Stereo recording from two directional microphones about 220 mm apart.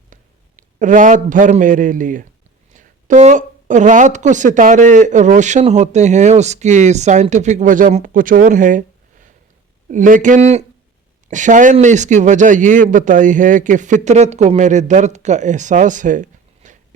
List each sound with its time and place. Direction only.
0.1 s a man's voice: 35° right (ahead or behind)